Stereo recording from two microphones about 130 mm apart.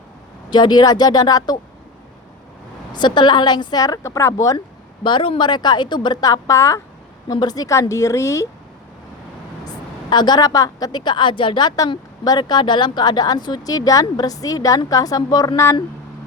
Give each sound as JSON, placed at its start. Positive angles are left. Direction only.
{"t": 0.5, "sound": "a woman's voice", "side_deg": 35}
{"t": 2.9, "sound": "a woman's voice", "side_deg": 35}
{"t": 5.0, "sound": "a woman's voice", "side_deg": 40}
{"t": 9.6, "sound": "a woman's voice", "side_deg": 35}